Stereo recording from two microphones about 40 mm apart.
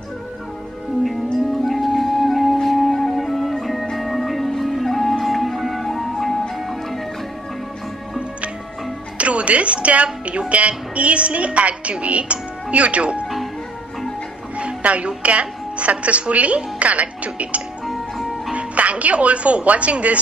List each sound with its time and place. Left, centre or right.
1.0 s music: centre
9.2 s a woman's voice: right
14.6 s speech: right
17.8 s music: centre
18.5 s speech: right